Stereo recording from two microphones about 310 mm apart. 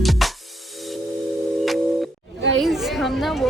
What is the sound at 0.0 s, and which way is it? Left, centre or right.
Music, centre.